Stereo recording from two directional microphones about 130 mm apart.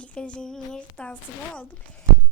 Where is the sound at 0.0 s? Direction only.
10° left (ahead or behind).